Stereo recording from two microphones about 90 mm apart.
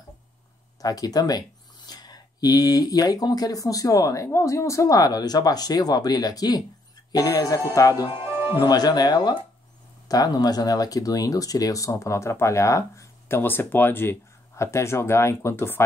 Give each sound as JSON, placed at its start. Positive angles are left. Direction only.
{"t": 0.7, "sound": "speech", "side_deg": 45}
{"t": 8.1, "sound": "music", "side_deg": -25}
{"t": 8.5, "sound": "speech", "side_deg": 50}
{"t": 13.4, "sound": "speech", "side_deg": 20}